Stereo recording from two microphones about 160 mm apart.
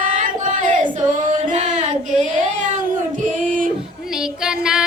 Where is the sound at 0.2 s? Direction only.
55° right (ahead or behind).